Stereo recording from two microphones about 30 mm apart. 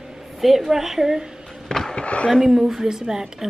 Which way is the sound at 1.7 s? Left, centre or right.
Centre.